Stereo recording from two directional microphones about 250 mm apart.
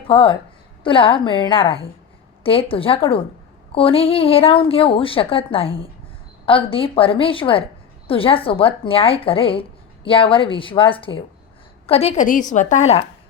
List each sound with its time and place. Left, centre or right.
0.1 s speech: left